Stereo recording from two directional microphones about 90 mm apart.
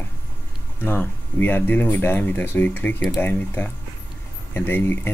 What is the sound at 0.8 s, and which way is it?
Speech, 20° left (ahead or behind).